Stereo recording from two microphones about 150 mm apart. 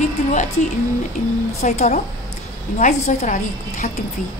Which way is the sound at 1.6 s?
50° left (ahead or behind).